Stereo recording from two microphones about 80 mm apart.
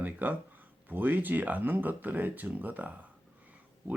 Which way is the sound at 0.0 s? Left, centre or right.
Right.